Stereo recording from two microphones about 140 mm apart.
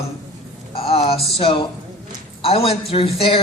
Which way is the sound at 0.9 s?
45° left (ahead or behind).